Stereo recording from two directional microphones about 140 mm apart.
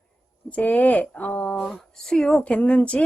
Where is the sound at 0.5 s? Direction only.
10° left (ahead or behind).